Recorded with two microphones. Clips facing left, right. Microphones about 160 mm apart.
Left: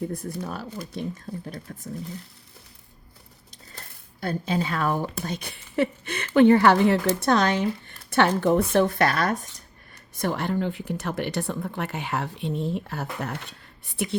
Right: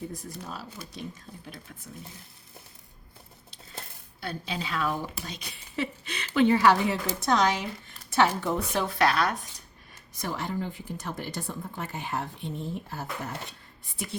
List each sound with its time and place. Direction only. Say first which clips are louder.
0.1 s a woman's voice: left 7 dB; 60° left (ahead or behind)
1.3 s speech: left 11 dB; 45° left (ahead or behind)
4.2 s a woman's voice: left 8 dB; 45° left (ahead or behind)
10.2 s speech: left 6 dB; 65° left (ahead or behind)